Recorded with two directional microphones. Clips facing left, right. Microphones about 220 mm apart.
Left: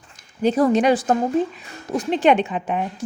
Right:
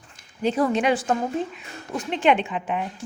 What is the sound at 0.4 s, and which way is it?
A woman's voice, 40° left (ahead or behind).